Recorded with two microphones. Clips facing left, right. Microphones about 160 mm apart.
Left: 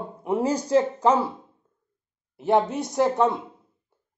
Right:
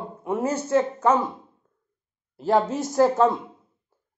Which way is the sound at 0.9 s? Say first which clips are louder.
Even; 10° left (ahead or behind).